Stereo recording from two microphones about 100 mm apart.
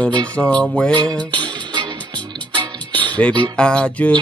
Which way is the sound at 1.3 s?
50° right (ahead or behind).